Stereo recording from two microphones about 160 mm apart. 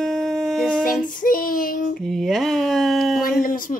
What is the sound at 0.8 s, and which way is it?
Child singing, 60° left (ahead or behind).